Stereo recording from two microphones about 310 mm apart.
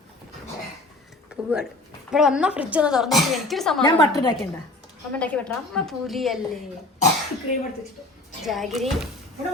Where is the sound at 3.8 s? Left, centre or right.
Centre.